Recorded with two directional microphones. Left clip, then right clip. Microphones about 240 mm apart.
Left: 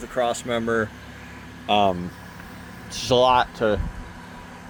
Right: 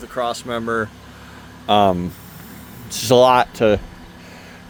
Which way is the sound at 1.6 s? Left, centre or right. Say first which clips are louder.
Right 5 dB; right.